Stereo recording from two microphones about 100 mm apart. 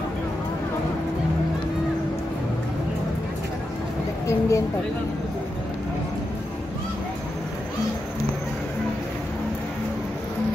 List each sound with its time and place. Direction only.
4.3 s speech: 30° left (ahead or behind)